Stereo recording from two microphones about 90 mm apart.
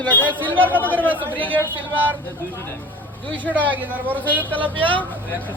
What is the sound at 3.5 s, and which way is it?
Speech, 20° right (ahead or behind).